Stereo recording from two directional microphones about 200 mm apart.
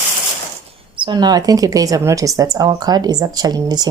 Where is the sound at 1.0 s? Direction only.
20° right (ahead or behind).